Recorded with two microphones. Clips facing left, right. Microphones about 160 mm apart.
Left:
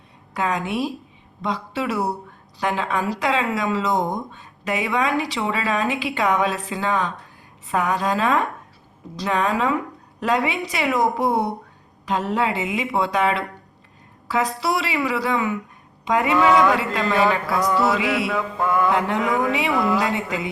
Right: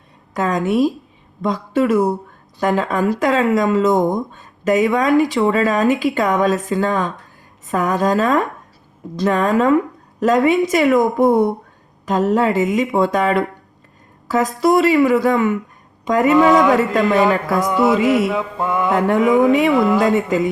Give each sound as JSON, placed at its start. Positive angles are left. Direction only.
{"t": 0.3, "sound": "speech", "side_deg": -45}
{"t": 17.6, "sound": "mantra", "side_deg": -20}
{"t": 17.9, "sound": "speech", "side_deg": -45}
{"t": 18.3, "sound": "mantra", "side_deg": -20}
{"t": 18.9, "sound": "speech", "side_deg": -45}
{"t": 19.7, "sound": "mantra", "side_deg": -20}
{"t": 20.0, "sound": "speech", "side_deg": -50}